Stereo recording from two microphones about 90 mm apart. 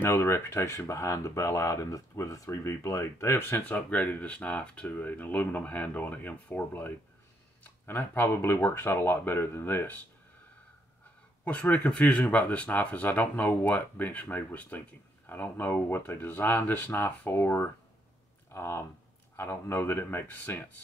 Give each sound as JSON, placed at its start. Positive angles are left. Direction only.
{"t": 0.0, "sound": "speech", "side_deg": 30}
{"t": 11.4, "sound": "speech", "side_deg": 15}